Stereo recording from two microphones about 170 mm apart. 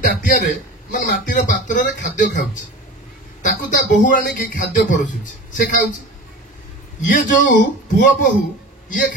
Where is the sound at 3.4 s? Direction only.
50° left (ahead or behind).